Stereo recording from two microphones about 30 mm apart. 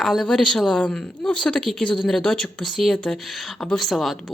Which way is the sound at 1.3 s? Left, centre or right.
Left.